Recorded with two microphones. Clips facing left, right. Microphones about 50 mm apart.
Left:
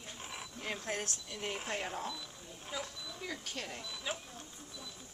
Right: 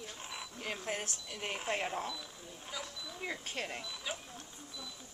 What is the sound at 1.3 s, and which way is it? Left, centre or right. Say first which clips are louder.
Speech: right 3 dB; centre.